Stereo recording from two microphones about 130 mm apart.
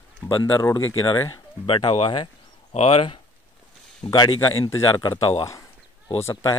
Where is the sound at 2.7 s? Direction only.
50° left (ahead or behind).